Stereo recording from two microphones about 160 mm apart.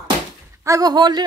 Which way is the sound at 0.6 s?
20° right (ahead or behind).